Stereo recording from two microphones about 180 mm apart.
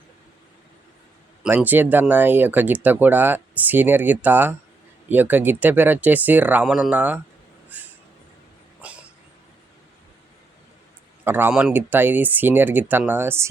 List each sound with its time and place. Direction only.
1.5 s speech: 10° right (ahead or behind)
7.7 s a sound: 10° right (ahead or behind)
8.8 s cough: 10° right (ahead or behind)
11.3 s speech: 10° right (ahead or behind)